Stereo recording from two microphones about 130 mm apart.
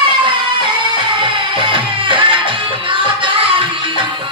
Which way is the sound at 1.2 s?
40° right (ahead or behind).